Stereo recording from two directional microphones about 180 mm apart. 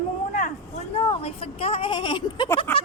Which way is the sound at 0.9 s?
30° left (ahead or behind).